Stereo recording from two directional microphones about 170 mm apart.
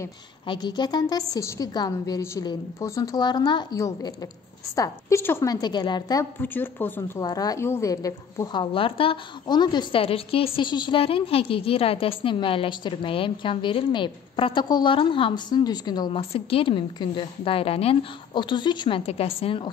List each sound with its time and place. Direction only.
0.5 s a woman's voice: 25° left (ahead or behind)
6.4 s speech: 10° left (ahead or behind)
7.2 s a woman's voice: 20° left (ahead or behind)